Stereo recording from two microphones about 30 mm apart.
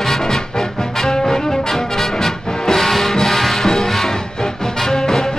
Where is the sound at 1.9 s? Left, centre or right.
Centre.